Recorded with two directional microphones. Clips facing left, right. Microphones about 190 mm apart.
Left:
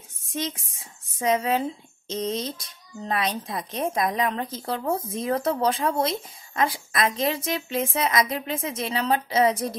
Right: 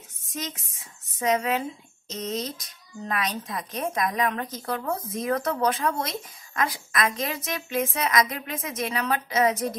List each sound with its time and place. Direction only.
0.3 s speech: 30° left (ahead or behind)